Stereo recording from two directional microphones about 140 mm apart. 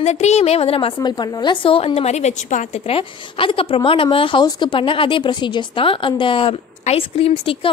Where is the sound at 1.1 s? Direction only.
30° left (ahead or behind); by 2.8 s 60° left (ahead or behind).